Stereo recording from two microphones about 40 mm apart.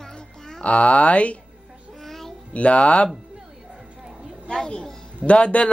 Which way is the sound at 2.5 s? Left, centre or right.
Left.